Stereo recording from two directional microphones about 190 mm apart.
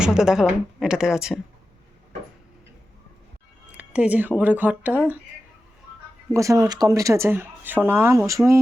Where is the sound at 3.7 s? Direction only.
10° right (ahead or behind).